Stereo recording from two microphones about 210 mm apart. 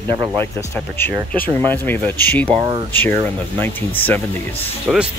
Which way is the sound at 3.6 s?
10° left (ahead or behind).